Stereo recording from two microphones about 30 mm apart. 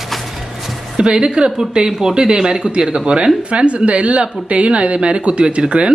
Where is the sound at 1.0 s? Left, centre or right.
Right.